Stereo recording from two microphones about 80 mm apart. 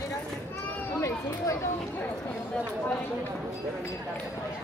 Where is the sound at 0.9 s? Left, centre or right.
Left.